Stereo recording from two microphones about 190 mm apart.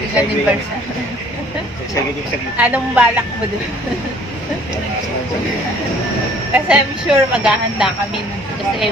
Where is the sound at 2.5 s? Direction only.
10° right (ahead or behind).